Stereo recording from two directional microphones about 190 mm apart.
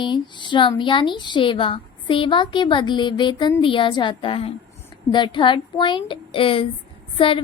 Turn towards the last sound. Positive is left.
turn(degrees=30)  # may be behind; listen again after turning